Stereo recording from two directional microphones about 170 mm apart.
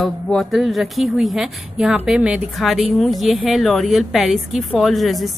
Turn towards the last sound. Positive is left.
turn(degrees=0)  # may be behind; listen again after turning